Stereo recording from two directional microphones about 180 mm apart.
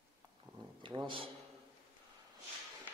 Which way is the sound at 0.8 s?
30° right (ahead or behind).